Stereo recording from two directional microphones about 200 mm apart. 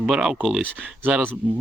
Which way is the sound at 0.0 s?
5° right (ahead or behind).